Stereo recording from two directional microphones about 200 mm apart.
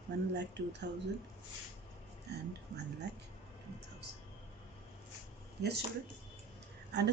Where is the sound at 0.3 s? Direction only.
60° right (ahead or behind).